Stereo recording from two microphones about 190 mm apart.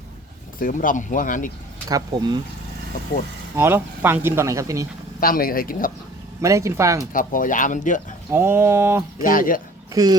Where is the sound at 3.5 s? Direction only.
10° right (ahead or behind).